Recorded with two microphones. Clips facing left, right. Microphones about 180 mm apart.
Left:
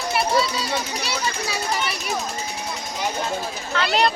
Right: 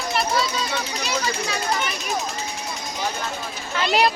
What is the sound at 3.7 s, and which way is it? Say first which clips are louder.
Speech: right 1 dB; 10° right (ahead or behind).